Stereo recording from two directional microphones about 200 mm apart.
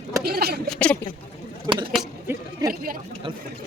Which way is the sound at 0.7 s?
5° left (ahead or behind).